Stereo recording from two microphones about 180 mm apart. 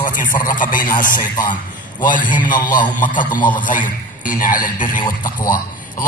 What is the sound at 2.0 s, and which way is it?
A man's voice, 45° left (ahead or behind).